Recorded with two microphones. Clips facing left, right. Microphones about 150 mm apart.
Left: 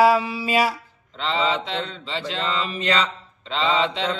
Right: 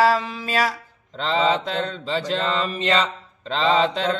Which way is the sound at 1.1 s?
40° right (ahead or behind).